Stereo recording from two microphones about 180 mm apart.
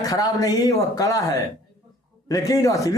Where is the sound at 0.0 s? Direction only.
20° left (ahead or behind).